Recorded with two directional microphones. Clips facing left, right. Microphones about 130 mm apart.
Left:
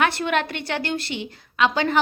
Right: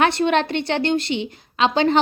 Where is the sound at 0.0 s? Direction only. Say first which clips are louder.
Right 4 dB; 25° right (ahead or behind).